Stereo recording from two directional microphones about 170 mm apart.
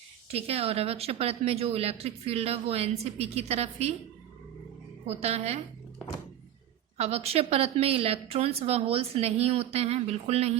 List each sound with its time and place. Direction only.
0.3 s a woman's voice: 35° right (ahead or behind)
5.0 s a woman's voice: 40° right (ahead or behind)
6.9 s a woman's voice: 40° right (ahead or behind)